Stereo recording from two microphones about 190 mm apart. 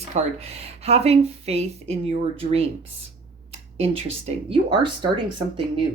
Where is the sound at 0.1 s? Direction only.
30° right (ahead or behind).